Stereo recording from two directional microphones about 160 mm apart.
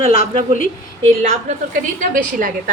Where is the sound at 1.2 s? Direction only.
50° right (ahead or behind).